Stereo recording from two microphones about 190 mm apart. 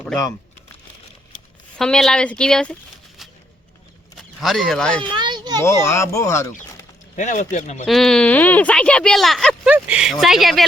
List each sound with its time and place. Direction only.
1.8 s speech: 5° left (ahead or behind)
4.2 s speech: centre (ahead or behind)
5.1 s a sound: 25° right (ahead or behind)
5.6 s speech: 15° left (ahead or behind)
7.2 s speech: 40° left (ahead or behind)
7.9 s speech: centre (ahead or behind)